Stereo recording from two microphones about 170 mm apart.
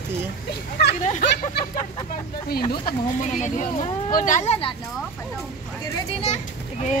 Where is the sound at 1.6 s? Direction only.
70° left (ahead or behind).